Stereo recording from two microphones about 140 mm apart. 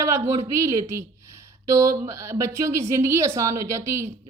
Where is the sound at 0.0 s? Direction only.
20° right (ahead or behind).